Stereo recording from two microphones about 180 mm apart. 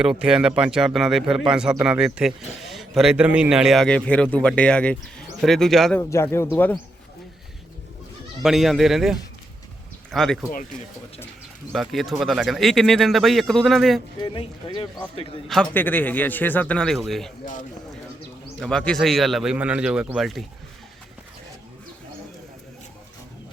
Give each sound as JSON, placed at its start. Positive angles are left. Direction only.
{"t": 0.0, "sound": "a man's voice", "side_deg": -5}
{"t": 6.0, "sound": "a man's voice", "side_deg": 15}
{"t": 8.4, "sound": "a man's voice", "side_deg": 0}
{"t": 11.7, "sound": "a man's voice", "side_deg": 0}
{"t": 14.2, "sound": "speech", "side_deg": 25}
{"t": 15.4, "sound": "a man's voice", "side_deg": 5}
{"t": 17.4, "sound": "speech", "side_deg": 45}
{"t": 18.6, "sound": "a man's voice", "side_deg": 5}